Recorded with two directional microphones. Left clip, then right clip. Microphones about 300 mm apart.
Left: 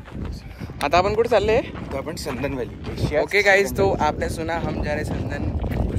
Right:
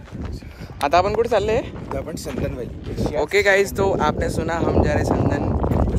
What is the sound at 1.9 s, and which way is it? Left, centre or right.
Speech, left.